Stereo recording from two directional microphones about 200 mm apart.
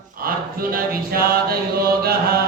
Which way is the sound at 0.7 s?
50° right (ahead or behind).